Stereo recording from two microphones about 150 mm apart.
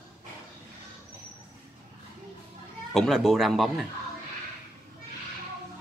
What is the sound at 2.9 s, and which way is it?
Speech, centre (ahead or behind).